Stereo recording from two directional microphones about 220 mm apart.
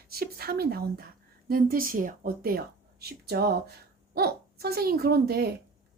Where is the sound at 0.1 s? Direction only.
45° right (ahead or behind).